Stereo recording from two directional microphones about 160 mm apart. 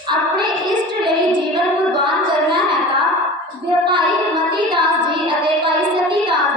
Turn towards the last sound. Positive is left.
turn(degrees=-30)  # may be behind; listen again after turning